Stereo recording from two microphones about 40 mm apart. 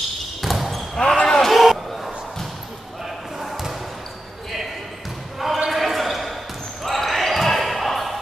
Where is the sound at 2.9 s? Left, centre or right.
Centre.